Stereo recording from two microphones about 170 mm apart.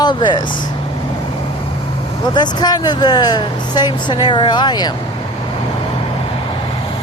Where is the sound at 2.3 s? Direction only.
25° left (ahead or behind).